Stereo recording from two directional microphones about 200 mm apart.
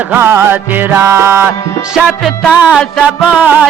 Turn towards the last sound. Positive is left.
turn(degrees=-5)  # may be behind; listen again after turning